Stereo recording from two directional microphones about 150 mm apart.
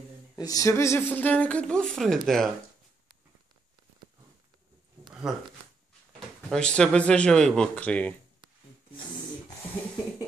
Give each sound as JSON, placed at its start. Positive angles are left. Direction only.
{"t": 0.4, "sound": "speech", "side_deg": 25}
{"t": 5.3, "sound": "speech", "side_deg": -5}